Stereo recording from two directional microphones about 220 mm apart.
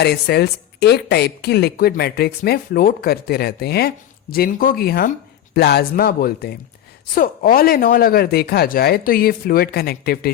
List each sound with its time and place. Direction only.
0.0 s a woman's voice: 45° left (ahead or behind)